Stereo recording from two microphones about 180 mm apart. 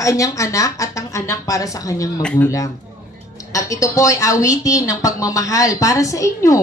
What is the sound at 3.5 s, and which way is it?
A woman's voice, 20° left (ahead or behind).